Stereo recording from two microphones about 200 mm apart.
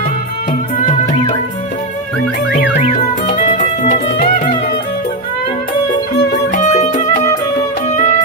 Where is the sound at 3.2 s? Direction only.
35° left (ahead or behind).